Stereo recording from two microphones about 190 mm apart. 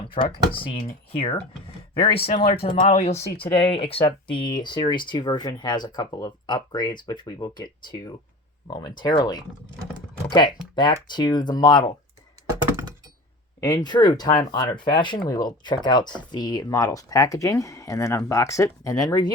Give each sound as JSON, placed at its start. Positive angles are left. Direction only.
{"t": 0.1, "sound": "speech", "side_deg": 25}
{"t": 13.6, "sound": "speech", "side_deg": 20}